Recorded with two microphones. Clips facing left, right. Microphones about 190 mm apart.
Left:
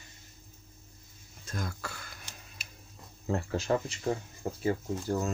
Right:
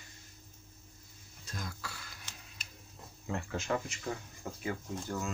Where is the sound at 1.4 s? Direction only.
50° left (ahead or behind).